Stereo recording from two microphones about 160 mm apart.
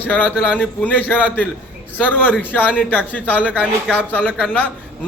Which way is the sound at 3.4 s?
10° right (ahead or behind).